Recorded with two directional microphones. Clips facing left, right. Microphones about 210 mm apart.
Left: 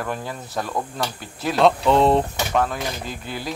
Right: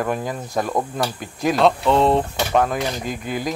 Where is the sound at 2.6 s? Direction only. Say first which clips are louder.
Right 3 dB; 15° right (ahead or behind).